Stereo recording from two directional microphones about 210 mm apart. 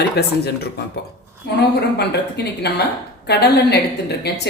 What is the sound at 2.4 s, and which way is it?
Speech, 50° left (ahead or behind).